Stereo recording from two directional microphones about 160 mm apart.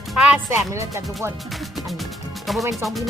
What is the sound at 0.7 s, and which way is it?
Speech, 20° right (ahead or behind).